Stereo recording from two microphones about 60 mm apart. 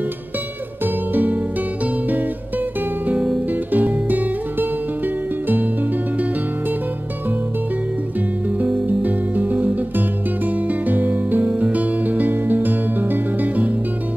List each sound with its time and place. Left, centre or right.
1.1 s music: right
3.7 s music: right
8.5 s music: right